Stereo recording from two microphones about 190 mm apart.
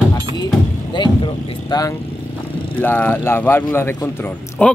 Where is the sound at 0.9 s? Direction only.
25° left (ahead or behind).